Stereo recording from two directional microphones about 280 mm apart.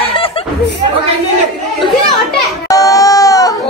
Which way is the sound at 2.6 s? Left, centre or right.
Centre.